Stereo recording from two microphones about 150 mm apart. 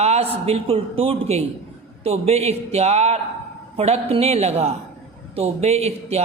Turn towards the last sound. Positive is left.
turn(degrees=-45)  # may be behind; listen again after turning